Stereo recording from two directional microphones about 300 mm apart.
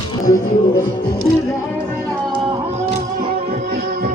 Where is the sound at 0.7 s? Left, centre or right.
Centre.